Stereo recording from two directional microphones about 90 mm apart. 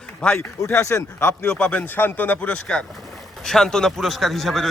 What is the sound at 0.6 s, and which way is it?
Speech, 30° left (ahead or behind).